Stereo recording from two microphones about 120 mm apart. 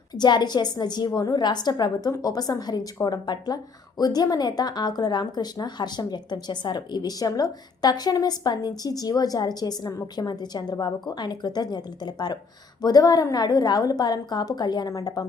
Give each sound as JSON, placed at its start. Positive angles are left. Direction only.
{"t": 0.2, "sound": "speech", "side_deg": 35}